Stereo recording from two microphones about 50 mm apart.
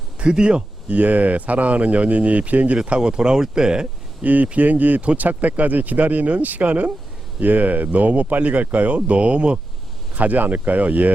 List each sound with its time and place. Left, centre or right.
0.2 s speech: right
0.9 s speech: right
2.8 s speech: centre
4.2 s speech: right
10.2 s speech: right